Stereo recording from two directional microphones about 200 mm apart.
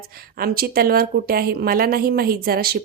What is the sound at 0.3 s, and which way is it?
A woman's voice, 50° right (ahead or behind).